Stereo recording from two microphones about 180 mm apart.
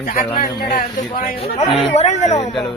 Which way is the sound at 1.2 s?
35° left (ahead or behind).